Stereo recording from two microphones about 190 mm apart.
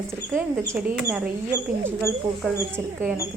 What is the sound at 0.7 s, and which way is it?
Speech, 10° right (ahead or behind).